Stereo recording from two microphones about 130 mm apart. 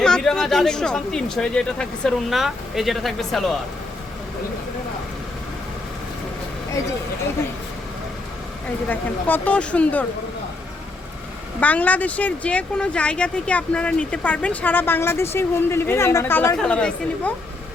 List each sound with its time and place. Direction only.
0.0 s speech: 5° left (ahead or behind)
8.9 s speech: 15° left (ahead or behind)
11.6 s speech: 10° left (ahead or behind)